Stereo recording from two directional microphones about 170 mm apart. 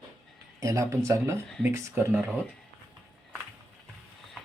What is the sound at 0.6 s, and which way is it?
Speech, 20° right (ahead or behind).